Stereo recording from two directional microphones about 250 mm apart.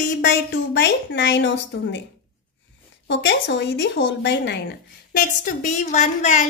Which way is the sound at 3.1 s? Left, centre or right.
Left.